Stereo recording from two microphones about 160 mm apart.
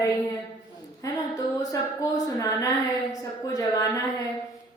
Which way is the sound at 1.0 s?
20° left (ahead or behind).